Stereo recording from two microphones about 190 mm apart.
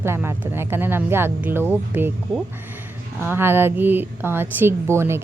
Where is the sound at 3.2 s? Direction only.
10° right (ahead or behind).